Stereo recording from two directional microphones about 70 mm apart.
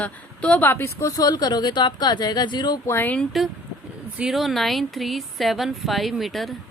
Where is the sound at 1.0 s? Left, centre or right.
Left.